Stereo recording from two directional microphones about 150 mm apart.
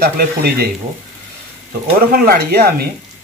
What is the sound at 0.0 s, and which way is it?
Speech, 90° right.